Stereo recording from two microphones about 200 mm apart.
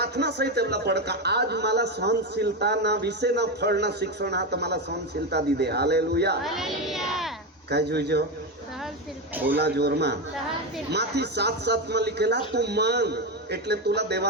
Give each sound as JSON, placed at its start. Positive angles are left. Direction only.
{"t": 0.0, "sound": "a man's voice", "side_deg": -55}
{"t": 6.4, "sound": "speech", "side_deg": 0}
{"t": 7.7, "sound": "a man's voice", "side_deg": -55}
{"t": 9.3, "sound": "speech", "side_deg": -10}
{"t": 9.6, "sound": "a man's voice", "side_deg": -55}